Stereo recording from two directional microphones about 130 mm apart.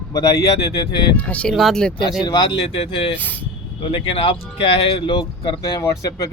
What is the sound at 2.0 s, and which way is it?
Speech, 35° left (ahead or behind).